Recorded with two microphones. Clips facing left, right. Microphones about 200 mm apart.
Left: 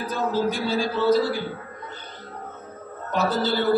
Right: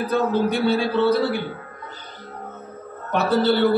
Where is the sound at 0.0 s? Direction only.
60° right (ahead or behind).